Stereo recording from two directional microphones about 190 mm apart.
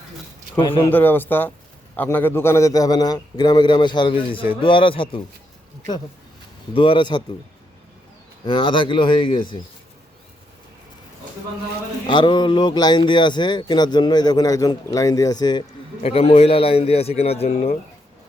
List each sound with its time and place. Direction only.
0.6 s speech: 25° left (ahead or behind)
0.9 s speech: 10° left (ahead or behind); by 5.2 s 25° left (ahead or behind)
6.7 s speech: 25° left (ahead or behind)
8.4 s speech: 25° left (ahead or behind)
12.0 s a man's voice: 25° left (ahead or behind)